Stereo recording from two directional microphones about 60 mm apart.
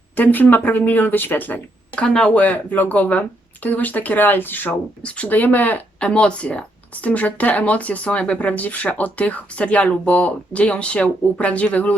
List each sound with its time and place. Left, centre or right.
0.2 s speech: left
2.0 s speech: centre; by 4.7 s left
5.0 s speech: left
6.0 s speech: centre